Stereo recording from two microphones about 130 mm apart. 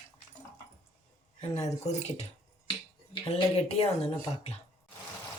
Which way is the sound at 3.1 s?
45° left (ahead or behind).